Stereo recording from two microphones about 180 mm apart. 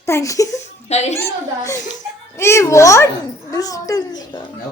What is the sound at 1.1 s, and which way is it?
A woman's voice, 15° left (ahead or behind).